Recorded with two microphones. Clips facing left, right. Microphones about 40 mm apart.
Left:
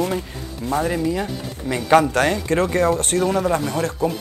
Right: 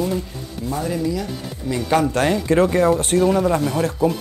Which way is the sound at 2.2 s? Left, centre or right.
Centre.